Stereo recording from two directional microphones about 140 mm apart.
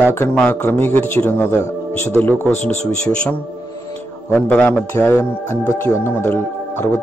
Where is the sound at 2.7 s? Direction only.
55° left (ahead or behind).